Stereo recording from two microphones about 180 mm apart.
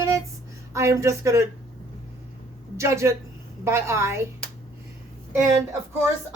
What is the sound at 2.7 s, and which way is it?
A woman's voice, 15° right (ahead or behind).